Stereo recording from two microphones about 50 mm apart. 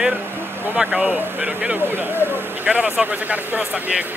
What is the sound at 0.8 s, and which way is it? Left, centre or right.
Speech, right.